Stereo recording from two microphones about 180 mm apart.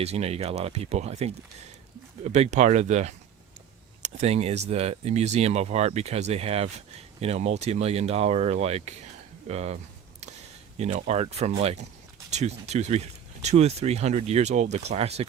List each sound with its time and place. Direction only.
0.0 s speech: 35° right (ahead or behind)
10.8 s speech: 40° right (ahead or behind)